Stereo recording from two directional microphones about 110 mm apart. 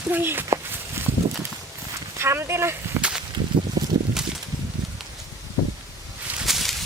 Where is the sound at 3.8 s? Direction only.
30° right (ahead or behind).